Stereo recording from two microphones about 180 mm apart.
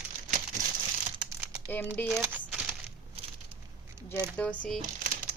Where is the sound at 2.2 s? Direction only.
10° right (ahead or behind).